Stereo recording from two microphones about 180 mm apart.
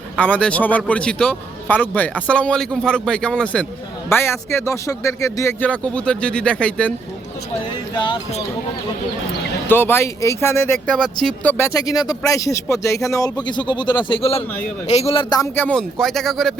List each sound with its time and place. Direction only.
0.2 s speech: 10° left (ahead or behind)
7.9 s speech: 25° left (ahead or behind)
9.6 s speech: 10° left (ahead or behind)
11.5 s speech: 15° left (ahead or behind)
15.5 s a man's voice: 5° left (ahead or behind)